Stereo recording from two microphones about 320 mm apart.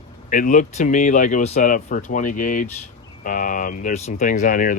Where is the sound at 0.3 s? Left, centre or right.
Left.